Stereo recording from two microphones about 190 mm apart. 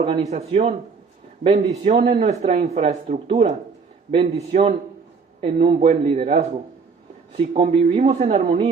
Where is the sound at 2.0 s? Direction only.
30° right (ahead or behind).